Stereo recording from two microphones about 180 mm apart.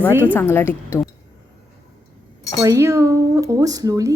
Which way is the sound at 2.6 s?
15° right (ahead or behind).